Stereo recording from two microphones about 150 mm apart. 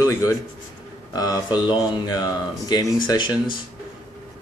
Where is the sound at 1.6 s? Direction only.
30° left (ahead or behind).